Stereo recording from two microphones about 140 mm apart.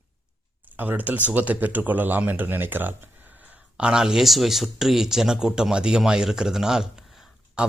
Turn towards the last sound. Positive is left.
turn(degrees=0)  # may be behind; listen again after turning